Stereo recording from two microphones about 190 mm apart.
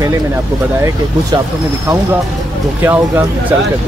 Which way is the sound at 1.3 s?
25° right (ahead or behind).